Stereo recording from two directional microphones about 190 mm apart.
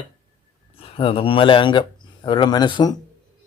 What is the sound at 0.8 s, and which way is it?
A man's voice, 30° left (ahead or behind).